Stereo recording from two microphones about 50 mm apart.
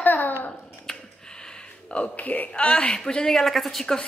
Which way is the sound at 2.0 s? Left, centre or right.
Left.